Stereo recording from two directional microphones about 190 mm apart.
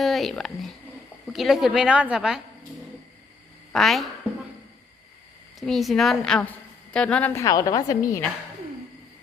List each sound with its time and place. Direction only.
0.0 s a woman's voice: centre (ahead or behind)
3.7 s a woman's voice: centre (ahead or behind)
5.5 s a woman's voice: centre (ahead or behind); by 8.2 s 20° left (ahead or behind)